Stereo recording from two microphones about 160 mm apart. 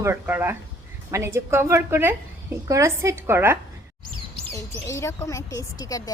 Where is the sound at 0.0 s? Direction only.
15° right (ahead or behind).